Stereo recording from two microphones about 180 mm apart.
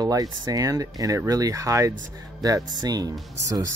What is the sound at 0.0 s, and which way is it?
Speech, 20° right (ahead or behind).